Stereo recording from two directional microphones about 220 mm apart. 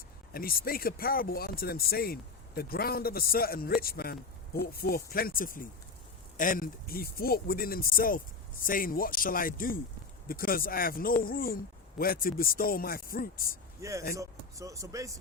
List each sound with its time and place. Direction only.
0.3 s speech: 40° left (ahead or behind)
13.8 s speech: 15° right (ahead or behind)